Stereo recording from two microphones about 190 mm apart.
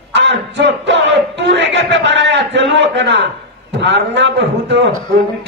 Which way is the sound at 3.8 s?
70° right (ahead or behind).